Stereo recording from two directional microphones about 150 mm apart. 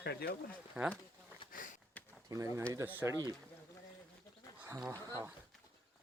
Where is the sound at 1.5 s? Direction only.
60° left (ahead or behind).